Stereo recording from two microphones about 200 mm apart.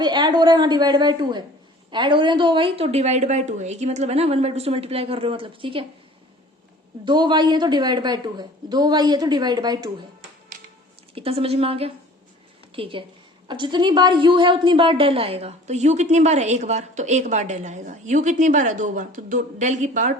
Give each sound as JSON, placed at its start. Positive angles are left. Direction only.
{"t": 0.0, "sound": "a woman's voice", "side_deg": -20}
{"t": 7.0, "sound": "a woman's voice", "side_deg": -20}
{"t": 11.1, "sound": "a woman's voice", "side_deg": -30}